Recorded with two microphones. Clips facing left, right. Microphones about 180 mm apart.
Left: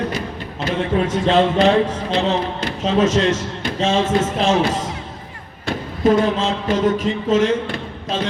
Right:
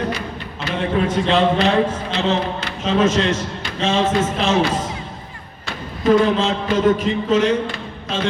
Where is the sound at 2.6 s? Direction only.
40° left (ahead or behind).